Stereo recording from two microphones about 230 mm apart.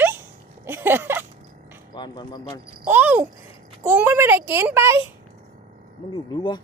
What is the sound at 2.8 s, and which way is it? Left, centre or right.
Speech, centre.